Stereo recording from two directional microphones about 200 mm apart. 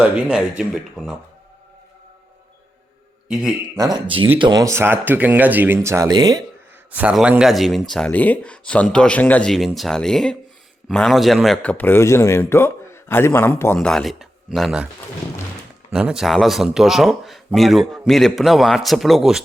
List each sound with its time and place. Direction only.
0.0 s a man's voice: 5° right (ahead or behind)
3.2 s speech: 5° right (ahead or behind)
3.8 s speech: 20° right (ahead or behind)
6.9 s a man's voice: 5° right (ahead or behind)
15.9 s a man's voice: 5° right (ahead or behind)